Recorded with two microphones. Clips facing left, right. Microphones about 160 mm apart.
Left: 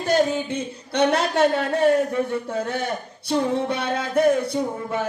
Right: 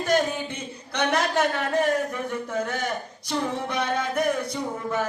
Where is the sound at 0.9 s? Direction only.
30° left (ahead or behind).